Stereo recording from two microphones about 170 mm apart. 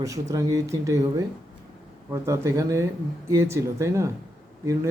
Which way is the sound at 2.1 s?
15° right (ahead or behind).